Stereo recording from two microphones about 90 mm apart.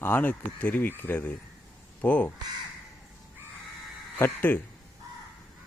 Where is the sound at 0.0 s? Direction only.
20° left (ahead or behind).